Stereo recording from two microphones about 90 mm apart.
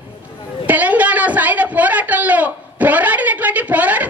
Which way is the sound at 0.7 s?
15° right (ahead or behind).